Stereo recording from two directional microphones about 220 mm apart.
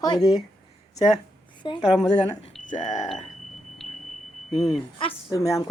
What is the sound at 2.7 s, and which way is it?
Speech, 35° left (ahead or behind).